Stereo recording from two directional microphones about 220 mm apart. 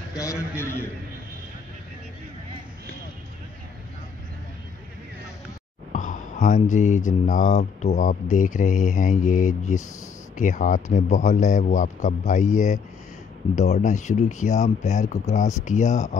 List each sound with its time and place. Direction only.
0.1 s a man's voice: 15° left (ahead or behind)
5.9 s speech: 35° left (ahead or behind)